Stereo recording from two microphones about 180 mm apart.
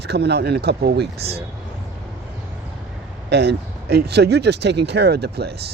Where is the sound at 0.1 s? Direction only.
65° right (ahead or behind).